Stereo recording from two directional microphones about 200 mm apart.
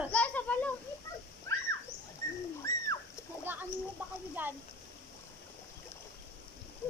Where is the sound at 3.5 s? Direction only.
10° right (ahead or behind).